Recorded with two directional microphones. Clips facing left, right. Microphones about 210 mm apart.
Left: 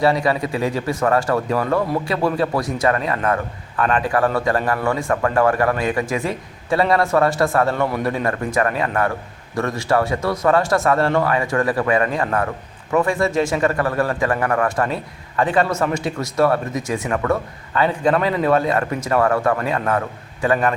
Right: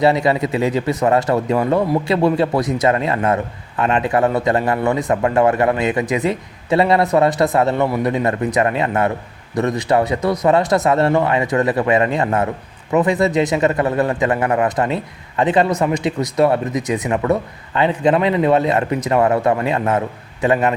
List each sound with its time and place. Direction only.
0.0 s speech: 25° right (ahead or behind)